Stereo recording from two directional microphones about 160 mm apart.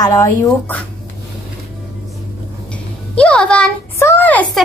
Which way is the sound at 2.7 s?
5° left (ahead or behind).